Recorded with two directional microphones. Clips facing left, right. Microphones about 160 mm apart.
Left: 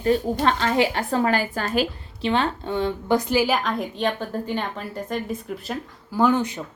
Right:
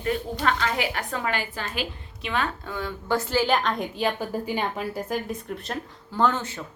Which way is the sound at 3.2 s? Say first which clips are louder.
Left 2 dB; 15° left (ahead or behind).